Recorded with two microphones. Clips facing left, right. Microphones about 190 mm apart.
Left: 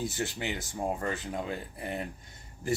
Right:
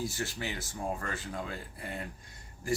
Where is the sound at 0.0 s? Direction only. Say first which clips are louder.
Left 2 dB; 20° left (ahead or behind).